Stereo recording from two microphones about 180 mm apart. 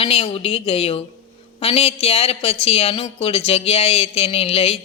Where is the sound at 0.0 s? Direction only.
30° left (ahead or behind).